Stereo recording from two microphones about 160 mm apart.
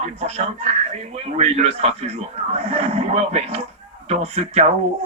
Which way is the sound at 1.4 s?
40° right (ahead or behind).